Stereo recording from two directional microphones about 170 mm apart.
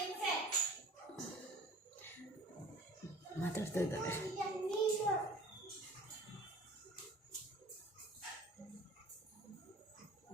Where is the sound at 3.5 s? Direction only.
15° left (ahead or behind).